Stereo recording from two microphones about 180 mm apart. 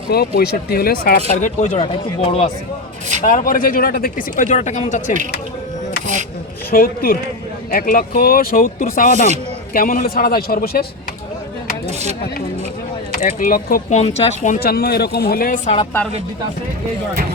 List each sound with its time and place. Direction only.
0.1 s a man's voice: 60° left (ahead or behind)
1.3 s speech: 40° left (ahead or behind)
1.8 s speech: 35° left (ahead or behind)
3.2 s speech: 50° left (ahead or behind)
6.7 s a man's voice: 55° left (ahead or behind)
13.2 s speech: 50° left (ahead or behind)
13.9 s speech: 35° left (ahead or behind)
14.6 s a man's voice: 60° left (ahead or behind)